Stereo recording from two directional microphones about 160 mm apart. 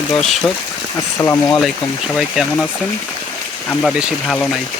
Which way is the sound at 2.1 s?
Centre (ahead or behind).